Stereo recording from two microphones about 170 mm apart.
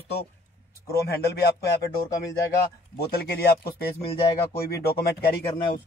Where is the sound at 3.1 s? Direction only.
65° left (ahead or behind).